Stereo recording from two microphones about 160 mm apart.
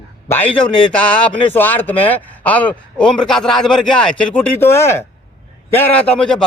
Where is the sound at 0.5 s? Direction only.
30° left (ahead or behind).